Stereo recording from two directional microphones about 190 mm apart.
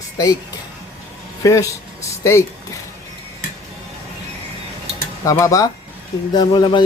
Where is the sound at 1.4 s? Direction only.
15° left (ahead or behind).